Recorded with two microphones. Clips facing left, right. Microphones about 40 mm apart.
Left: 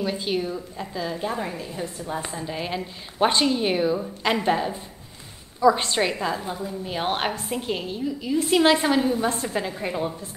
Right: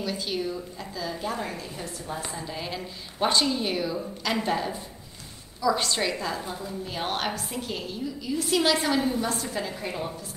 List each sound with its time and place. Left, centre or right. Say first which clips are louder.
0.0 s a woman's voice: left 4 dB; left